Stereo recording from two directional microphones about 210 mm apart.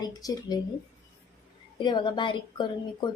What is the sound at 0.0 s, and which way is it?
Speech, 20° left (ahead or behind).